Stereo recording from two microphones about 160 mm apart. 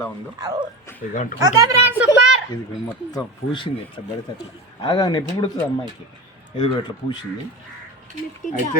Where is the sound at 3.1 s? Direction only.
30° left (ahead or behind).